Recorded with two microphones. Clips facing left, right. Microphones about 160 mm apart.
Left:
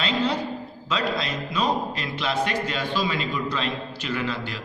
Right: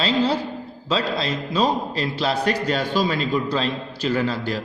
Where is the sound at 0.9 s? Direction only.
30° right (ahead or behind).